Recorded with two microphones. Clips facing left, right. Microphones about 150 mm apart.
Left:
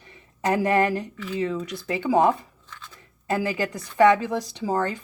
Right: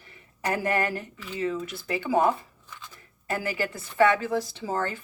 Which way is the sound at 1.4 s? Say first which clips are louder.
Left 2 dB; 20° left (ahead or behind).